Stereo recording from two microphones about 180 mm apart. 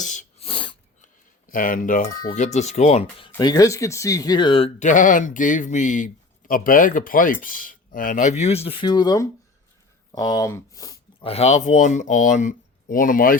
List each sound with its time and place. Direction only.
0.0 s sneeze: 40° left (ahead or behind)
1.0 s speech: 50° left (ahead or behind); by 10.9 s 20° left (ahead or behind)
11.2 s speech: 35° left (ahead or behind); by 13.3 s 50° left (ahead or behind)